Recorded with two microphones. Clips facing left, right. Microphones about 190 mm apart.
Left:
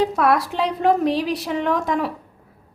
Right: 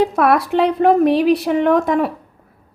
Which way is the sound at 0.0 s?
60° right (ahead or behind).